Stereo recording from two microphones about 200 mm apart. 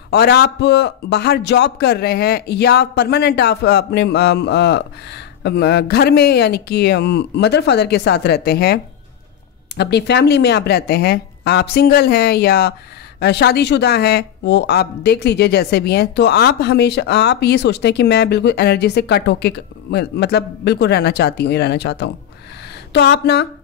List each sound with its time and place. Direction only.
0.1 s speech: 55° left (ahead or behind)
9.8 s a woman's voice: 60° left (ahead or behind)